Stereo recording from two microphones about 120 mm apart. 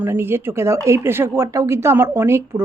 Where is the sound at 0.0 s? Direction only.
20° right (ahead or behind).